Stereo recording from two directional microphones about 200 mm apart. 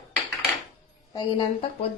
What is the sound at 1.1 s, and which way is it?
Speech, 20° left (ahead or behind).